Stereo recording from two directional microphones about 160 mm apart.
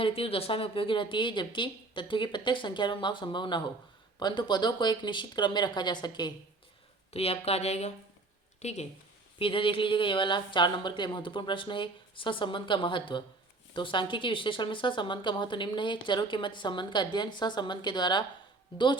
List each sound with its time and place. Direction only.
0.0 s a woman's voice: 35° left (ahead or behind)
7.1 s speech: 40° left (ahead or behind)
9.4 s a woman's voice: 35° left (ahead or behind)